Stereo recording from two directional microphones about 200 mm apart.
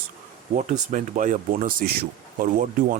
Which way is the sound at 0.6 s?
40° right (ahead or behind).